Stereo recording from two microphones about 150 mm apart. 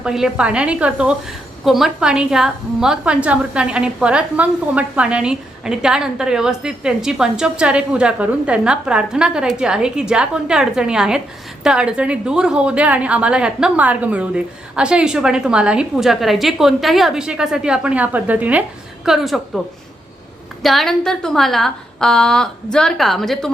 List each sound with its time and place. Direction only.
0.0 s a woman's voice: 5° right (ahead or behind)
20.6 s a woman's voice: centre (ahead or behind)